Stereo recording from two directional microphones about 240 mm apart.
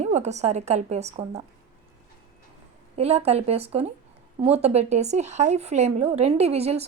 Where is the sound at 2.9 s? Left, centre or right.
Right.